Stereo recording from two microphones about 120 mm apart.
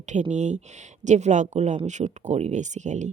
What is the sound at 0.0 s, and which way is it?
Speech, 80° right.